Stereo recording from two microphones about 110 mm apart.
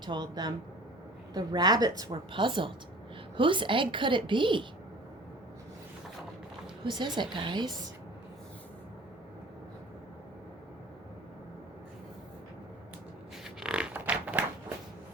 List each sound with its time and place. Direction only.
0.0 s speech: 40° right (ahead or behind)
2.3 s a woman's voice: 50° right (ahead or behind)
6.8 s a woman's voice: 45° right (ahead or behind)
13.4 s a sound: 5° right (ahead or behind)